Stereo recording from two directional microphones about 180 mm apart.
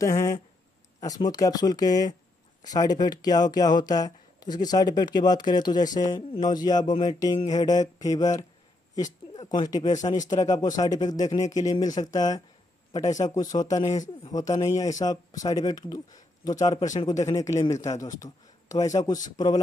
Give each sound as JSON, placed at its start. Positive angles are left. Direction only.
{"t": 0.0, "sound": "speech", "side_deg": 15}
{"t": 9.9, "sound": "speech", "side_deg": 45}
{"t": 10.3, "sound": "speech", "side_deg": 20}